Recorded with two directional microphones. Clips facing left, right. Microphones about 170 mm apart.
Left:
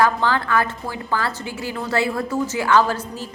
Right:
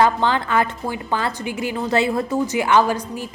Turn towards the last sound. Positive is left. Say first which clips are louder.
# right 1 dB
turn(degrees=-15)  # may be behind; listen again after turning